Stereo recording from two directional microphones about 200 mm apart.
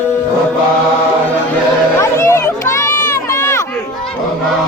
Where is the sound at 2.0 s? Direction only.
15° left (ahead or behind).